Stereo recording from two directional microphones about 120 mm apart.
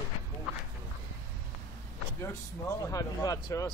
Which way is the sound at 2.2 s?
25° left (ahead or behind).